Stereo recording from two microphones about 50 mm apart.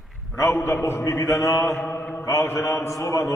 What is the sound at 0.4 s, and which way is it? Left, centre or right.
Speech, left.